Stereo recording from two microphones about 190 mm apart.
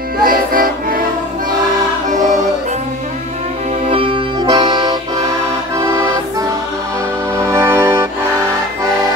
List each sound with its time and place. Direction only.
0.2 s music: 50° right (ahead or behind)
3.9 s accordion: 25° right (ahead or behind)
7.3 s music: 15° right (ahead or behind)